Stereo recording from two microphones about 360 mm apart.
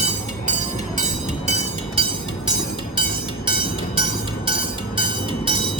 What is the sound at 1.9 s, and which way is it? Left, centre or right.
Train, centre.